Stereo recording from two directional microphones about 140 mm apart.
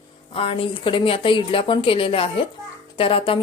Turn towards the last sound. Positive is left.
turn(degrees=40)  # may be behind; listen again after turning